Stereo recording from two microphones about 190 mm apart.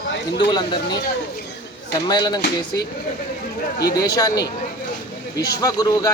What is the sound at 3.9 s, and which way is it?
Speech, 20° left (ahead or behind).